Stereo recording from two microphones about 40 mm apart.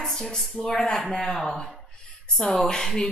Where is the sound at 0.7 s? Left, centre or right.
Centre.